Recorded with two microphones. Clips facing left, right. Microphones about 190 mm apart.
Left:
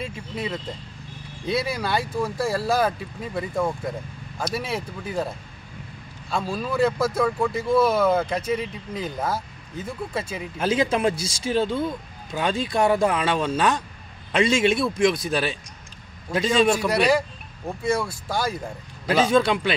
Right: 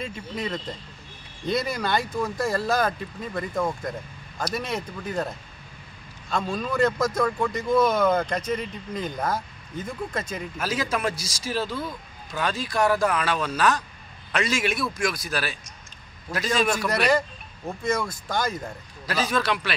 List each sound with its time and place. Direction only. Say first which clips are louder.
0.0 s speech: left 1 dB; 5° left (ahead or behind)
6.3 s speech: left 1 dB; 5° left (ahead or behind)
10.6 s speech: left 6 dB; 25° left (ahead or behind)
16.7 s speech: left 2 dB; 10° left (ahead or behind)
19.2 s speech: left 5 dB; 25° left (ahead or behind)